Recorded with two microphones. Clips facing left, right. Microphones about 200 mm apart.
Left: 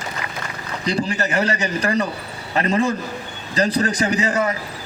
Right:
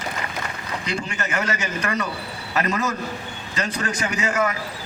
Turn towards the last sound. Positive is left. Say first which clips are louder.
# left 3 dB
turn(degrees=35)  # may be behind; listen again after turning